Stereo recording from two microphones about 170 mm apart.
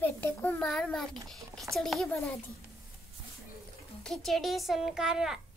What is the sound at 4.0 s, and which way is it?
A child's voice, centre (ahead or behind).